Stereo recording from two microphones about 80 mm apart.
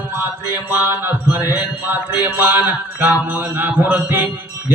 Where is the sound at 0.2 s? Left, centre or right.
Right.